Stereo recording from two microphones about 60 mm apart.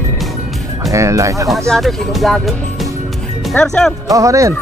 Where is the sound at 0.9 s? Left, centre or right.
Right.